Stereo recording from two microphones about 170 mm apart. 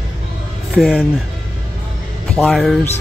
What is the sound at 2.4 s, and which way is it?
Speech, centre (ahead or behind).